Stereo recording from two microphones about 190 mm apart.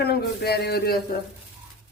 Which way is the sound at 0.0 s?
55° left (ahead or behind).